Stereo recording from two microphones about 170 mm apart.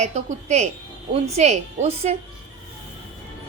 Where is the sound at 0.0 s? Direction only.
40° right (ahead or behind).